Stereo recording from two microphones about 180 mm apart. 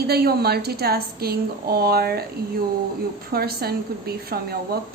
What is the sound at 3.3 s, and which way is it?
A woman's voice, 60° right (ahead or behind).